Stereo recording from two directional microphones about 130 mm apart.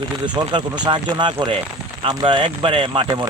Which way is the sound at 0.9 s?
35° right (ahead or behind).